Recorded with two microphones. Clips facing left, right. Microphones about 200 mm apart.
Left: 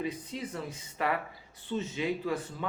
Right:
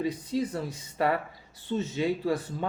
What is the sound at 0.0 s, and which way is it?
Speech, 35° right (ahead or behind).